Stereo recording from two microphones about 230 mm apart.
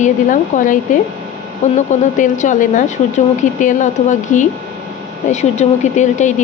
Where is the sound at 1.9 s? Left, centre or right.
Left.